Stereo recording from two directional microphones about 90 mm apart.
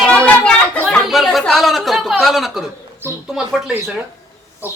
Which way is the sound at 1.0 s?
Centre (ahead or behind).